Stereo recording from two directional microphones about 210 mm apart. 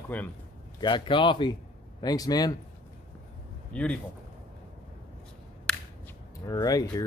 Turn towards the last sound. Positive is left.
turn(degrees=15)  # may be behind; listen again after turning